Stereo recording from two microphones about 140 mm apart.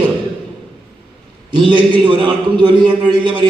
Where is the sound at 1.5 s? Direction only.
35° right (ahead or behind).